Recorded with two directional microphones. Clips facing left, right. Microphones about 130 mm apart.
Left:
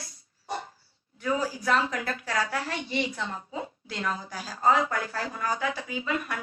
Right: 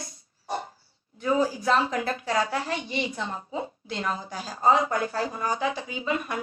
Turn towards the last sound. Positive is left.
turn(degrees=-25)  # may be behind; listen again after turning